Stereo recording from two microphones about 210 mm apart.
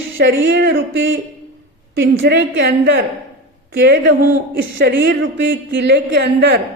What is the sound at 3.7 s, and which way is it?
Speech, 50° right (ahead or behind).